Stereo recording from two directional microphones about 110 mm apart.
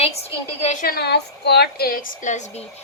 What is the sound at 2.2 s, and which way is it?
Speech, 90° left.